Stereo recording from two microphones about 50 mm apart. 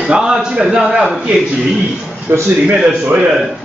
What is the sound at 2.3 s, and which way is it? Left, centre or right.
Speech, right.